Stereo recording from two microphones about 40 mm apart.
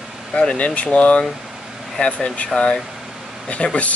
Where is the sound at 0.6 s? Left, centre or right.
Left.